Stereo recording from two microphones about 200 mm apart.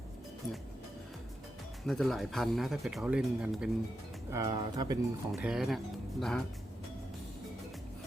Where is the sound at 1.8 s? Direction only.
Centre (ahead or behind).